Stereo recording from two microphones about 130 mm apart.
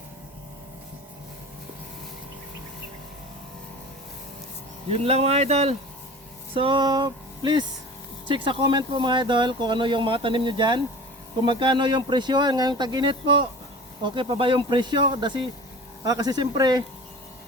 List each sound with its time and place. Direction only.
4.9 s speech: 55° right (ahead or behind)
6.5 s a sound: 40° right (ahead or behind)
8.3 s speech: 40° right (ahead or behind)